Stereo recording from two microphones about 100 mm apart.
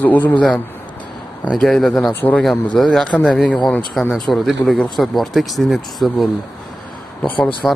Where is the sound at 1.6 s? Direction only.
5° left (ahead or behind).